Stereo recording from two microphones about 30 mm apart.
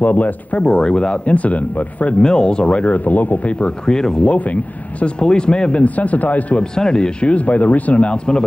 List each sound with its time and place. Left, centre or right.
0.0 s speech: left
0.7 s speech: left
1.2 s speech: left
2.2 s speech: left
2.9 s speech: left
3.8 s speech: left
4.2 s speech: left
5.0 s speech: left
5.8 s speech: left
6.8 s speech: left
7.3 s speech: left
8.1 s speech: left